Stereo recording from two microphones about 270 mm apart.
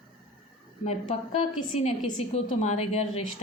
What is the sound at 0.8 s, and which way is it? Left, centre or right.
A woman's voice, left.